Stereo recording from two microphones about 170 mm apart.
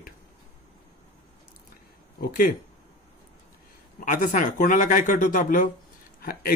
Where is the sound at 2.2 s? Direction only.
55° left (ahead or behind).